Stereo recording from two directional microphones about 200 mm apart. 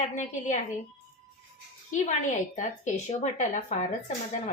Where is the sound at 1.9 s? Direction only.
35° left (ahead or behind).